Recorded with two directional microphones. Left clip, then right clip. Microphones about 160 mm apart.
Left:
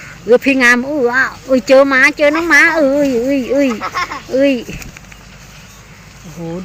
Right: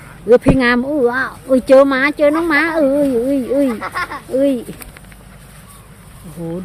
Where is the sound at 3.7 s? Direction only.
75° left (ahead or behind).